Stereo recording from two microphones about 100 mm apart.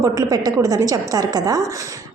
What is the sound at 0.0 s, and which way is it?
A woman's voice, 35° right (ahead or behind).